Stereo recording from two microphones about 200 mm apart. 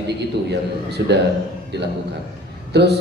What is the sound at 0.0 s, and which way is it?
A man's voice, 55° right (ahead or behind).